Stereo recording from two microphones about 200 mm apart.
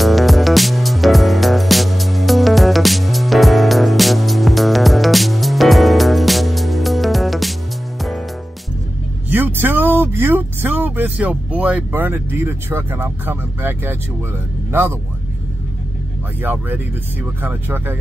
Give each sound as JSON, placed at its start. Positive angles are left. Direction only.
{"t": 0.0, "sound": "music", "side_deg": 0}
{"t": 9.3, "sound": "vehicle", "side_deg": -10}
{"t": 14.7, "sound": "speech", "side_deg": -10}
{"t": 16.4, "sound": "speech", "side_deg": -10}